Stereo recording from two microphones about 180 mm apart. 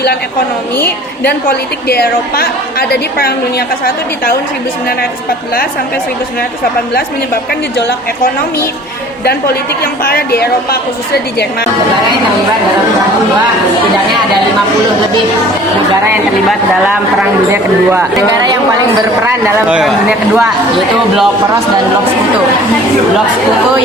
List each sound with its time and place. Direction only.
1.2 s a woman's voice: 60° left (ahead or behind)
9.8 s a woman's voice: 55° left (ahead or behind)
19.2 s speech: 15° right (ahead or behind)